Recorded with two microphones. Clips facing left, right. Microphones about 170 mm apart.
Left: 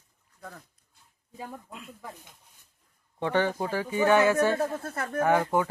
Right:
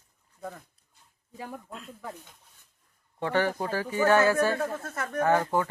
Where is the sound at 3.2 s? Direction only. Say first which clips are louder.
Left 1 dB; 15° left (ahead or behind).